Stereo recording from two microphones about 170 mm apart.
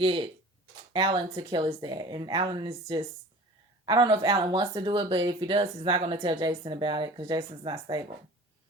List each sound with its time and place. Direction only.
0.0 s speech: 30° right (ahead or behind)
3.8 s speech: 25° right (ahead or behind)